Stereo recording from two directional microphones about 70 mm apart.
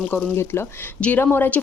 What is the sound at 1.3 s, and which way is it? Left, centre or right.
Speech, left.